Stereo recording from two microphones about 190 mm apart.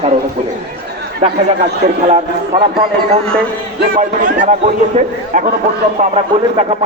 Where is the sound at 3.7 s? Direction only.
45° right (ahead or behind).